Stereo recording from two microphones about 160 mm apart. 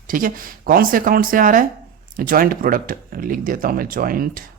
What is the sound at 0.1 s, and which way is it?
Speech, 60° right (ahead or behind).